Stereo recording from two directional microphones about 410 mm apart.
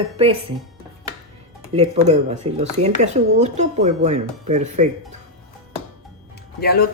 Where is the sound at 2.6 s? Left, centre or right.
Centre.